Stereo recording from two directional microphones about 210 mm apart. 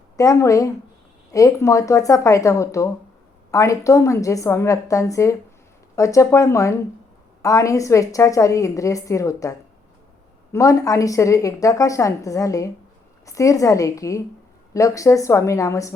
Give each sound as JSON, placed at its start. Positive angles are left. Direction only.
{"t": 0.2, "sound": "a woman's voice", "side_deg": 15}